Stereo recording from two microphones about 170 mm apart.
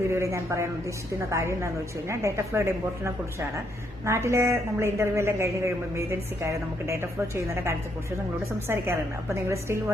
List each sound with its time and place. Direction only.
0.1 s a woman's voice: 15° right (ahead or behind)